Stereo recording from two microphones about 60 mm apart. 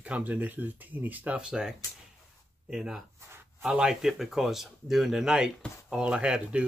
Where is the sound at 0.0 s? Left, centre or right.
Right.